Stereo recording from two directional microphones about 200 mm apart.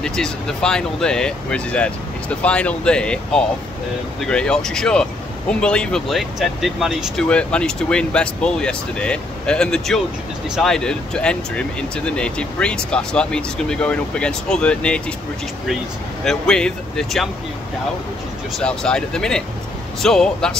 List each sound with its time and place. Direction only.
0.0 s speech: 5° left (ahead or behind)
16.3 s speech: 5° left (ahead or behind)
18.6 s speech: 5° left (ahead or behind)